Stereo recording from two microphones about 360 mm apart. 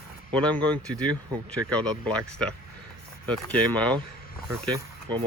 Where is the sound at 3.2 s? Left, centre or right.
Centre.